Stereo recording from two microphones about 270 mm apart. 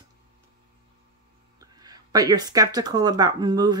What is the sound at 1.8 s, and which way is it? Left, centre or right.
Speech, centre.